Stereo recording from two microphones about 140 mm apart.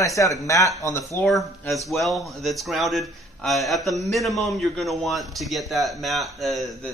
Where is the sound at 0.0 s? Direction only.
25° left (ahead or behind).